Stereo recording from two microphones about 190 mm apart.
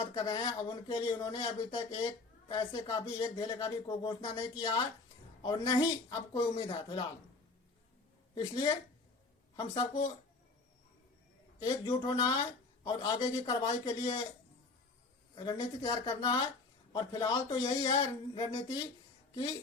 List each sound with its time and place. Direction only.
0.0 s speech: 25° left (ahead or behind)
8.4 s speech: 25° left (ahead or behind)
11.6 s speech: 20° left (ahead or behind)
15.4 s speech: 25° left (ahead or behind)